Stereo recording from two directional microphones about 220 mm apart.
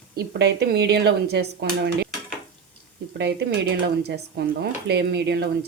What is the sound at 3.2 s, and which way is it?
Speech, 50° right (ahead or behind).